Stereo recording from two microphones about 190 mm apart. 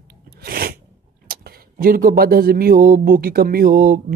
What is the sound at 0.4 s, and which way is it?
Sneeze, 50° right (ahead or behind).